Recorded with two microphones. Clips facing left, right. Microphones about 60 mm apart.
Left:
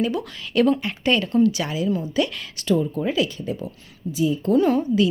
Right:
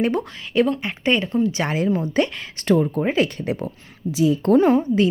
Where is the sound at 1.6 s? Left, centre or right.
Right.